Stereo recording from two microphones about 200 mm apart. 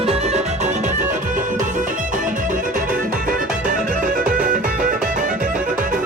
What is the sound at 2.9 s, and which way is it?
Music, 40° right (ahead or behind).